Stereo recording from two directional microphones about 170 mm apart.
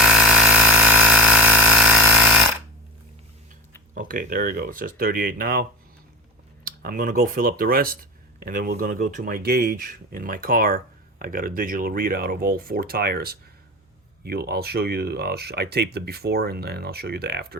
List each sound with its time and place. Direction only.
0.0 s engine: 5° right (ahead or behind)
3.9 s speech: 50° right (ahead or behind)
6.7 s speech: 60° right (ahead or behind)